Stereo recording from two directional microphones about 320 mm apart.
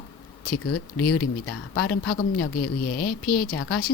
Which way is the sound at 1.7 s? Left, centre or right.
Left.